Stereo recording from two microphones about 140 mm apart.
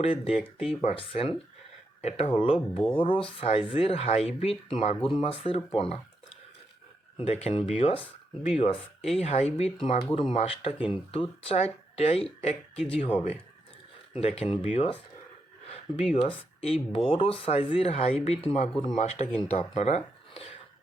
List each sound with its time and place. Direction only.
0.0 s speech: 45° left (ahead or behind)
7.2 s speech: 45° left (ahead or behind)
14.2 s speech: 45° left (ahead or behind)
16.6 s speech: 45° left (ahead or behind)